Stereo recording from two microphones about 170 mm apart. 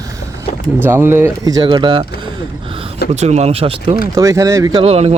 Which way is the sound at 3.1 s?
40° right (ahead or behind).